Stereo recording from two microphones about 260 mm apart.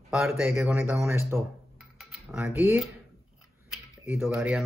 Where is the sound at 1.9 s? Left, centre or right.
Centre.